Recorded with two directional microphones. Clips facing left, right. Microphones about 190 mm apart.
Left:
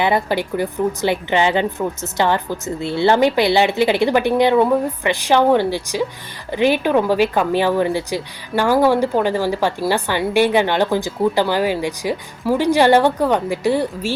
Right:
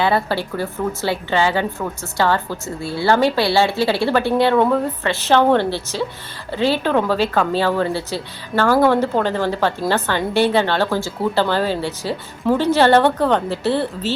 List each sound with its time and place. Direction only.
0.0 s speech: 15° left (ahead or behind)